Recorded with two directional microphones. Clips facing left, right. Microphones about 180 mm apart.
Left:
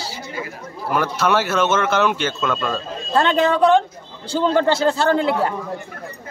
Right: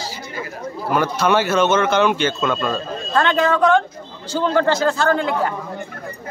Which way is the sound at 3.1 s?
30° left (ahead or behind).